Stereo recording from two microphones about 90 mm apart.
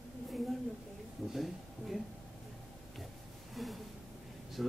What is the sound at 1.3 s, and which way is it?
Speech, centre (ahead or behind).